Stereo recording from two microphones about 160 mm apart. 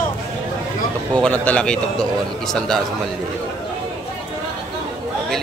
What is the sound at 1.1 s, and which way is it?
A man's voice, 5° left (ahead or behind).